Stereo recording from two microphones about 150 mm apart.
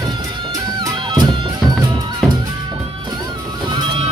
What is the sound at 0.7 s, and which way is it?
Music, 30° right (ahead or behind).